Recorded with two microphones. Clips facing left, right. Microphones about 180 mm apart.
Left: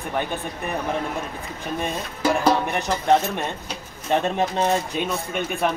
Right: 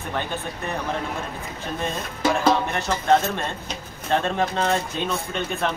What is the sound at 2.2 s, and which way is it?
Music, 10° left (ahead or behind).